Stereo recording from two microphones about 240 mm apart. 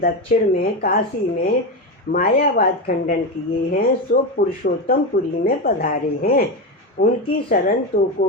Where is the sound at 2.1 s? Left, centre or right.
Left.